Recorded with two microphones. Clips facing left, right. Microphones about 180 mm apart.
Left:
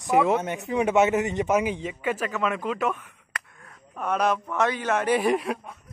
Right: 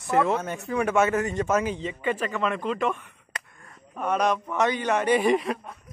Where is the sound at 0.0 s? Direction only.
15° left (ahead or behind).